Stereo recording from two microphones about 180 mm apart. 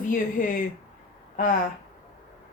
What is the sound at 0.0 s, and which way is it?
Speech, 50° left (ahead or behind).